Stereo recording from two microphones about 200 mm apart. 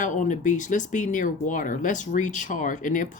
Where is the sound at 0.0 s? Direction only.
40° left (ahead or behind).